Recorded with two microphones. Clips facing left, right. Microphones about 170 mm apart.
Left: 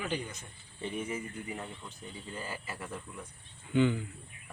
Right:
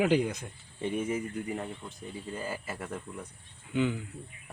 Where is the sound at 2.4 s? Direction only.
45° right (ahead or behind).